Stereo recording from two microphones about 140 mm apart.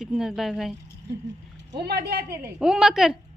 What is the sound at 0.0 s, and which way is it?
Speech, 5° right (ahead or behind).